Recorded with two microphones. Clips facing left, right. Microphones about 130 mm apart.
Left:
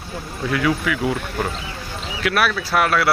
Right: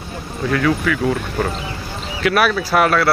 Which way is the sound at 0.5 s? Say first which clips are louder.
Right 3 dB; 15° left (ahead or behind).